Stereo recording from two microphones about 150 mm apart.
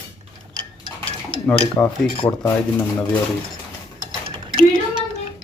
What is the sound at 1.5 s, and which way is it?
Cutlery, 5° left (ahead or behind).